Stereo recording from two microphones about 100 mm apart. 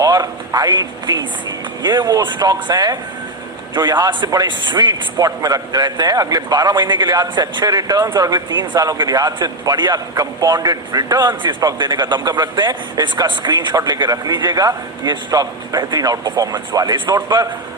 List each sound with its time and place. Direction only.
0.0 s a man's voice: 40° right (ahead or behind)